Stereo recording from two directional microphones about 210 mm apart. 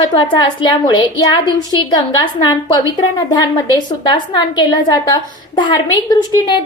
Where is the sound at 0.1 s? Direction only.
20° left (ahead or behind).